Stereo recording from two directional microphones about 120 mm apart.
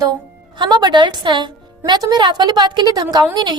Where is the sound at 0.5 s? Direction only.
40° right (ahead or behind).